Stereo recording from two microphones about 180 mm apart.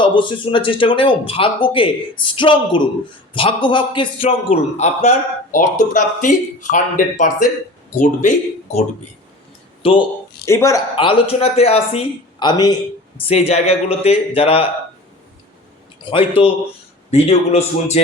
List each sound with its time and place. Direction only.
0.0 s speech: 25° left (ahead or behind); by 8.3 s 45° left (ahead or behind)
9.8 s speech: 30° left (ahead or behind)
10.4 s speech: 15° left (ahead or behind)
10.9 s speech: 30° left (ahead or behind)
13.1 s speech: 35° left (ahead or behind)
16.0 s speech: 30° left (ahead or behind)